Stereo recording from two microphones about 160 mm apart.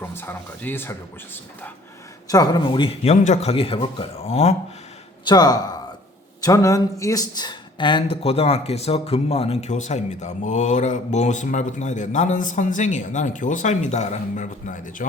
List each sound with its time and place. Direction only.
0.0 s speech: 15° left (ahead or behind)
2.2 s a man's voice: 25° left (ahead or behind); by 4.5 s 40° left (ahead or behind)
5.2 s speech: 25° left (ahead or behind); by 15.0 s 55° left (ahead or behind)